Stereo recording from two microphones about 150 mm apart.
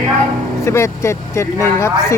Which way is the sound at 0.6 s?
20° left (ahead or behind).